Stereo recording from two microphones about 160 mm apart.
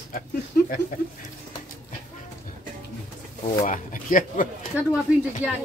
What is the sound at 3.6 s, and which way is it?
Speech, 60° left (ahead or behind).